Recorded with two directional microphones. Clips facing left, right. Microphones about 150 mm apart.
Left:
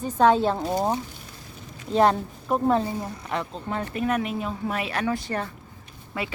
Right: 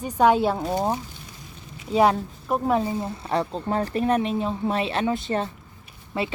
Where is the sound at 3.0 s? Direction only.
30° right (ahead or behind).